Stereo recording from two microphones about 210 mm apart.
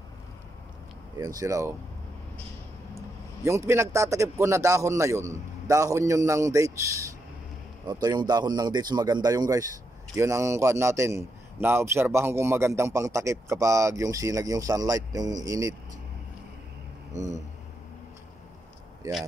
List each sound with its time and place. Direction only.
1.1 s a man's voice: 15° right (ahead or behind)
3.4 s a man's voice: 15° right (ahead or behind)
19.0 s a man's voice: 15° right (ahead or behind)